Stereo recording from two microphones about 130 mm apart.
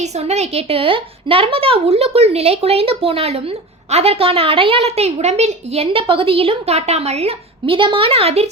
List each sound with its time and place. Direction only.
0.0 s a woman's voice: 60° right (ahead or behind)